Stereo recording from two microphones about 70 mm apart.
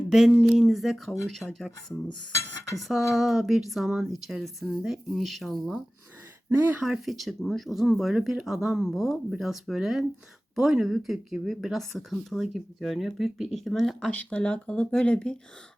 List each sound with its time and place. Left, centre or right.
0.6 s speech: centre
6.5 s speech: right
6.8 s speech: centre
14.1 s speech: centre